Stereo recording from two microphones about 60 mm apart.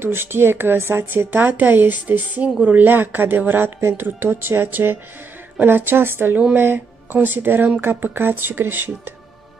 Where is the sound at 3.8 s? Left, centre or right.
Right.